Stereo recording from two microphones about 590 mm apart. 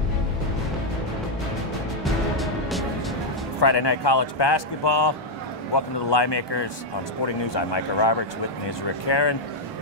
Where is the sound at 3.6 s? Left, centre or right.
Left.